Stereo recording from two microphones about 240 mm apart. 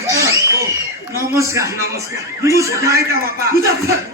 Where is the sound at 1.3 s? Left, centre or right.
Centre.